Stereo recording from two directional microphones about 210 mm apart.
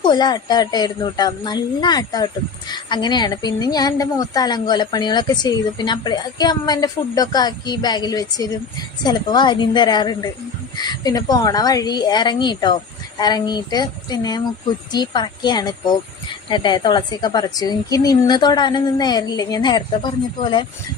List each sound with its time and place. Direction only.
0.0 s a woman's voice: 20° left (ahead or behind)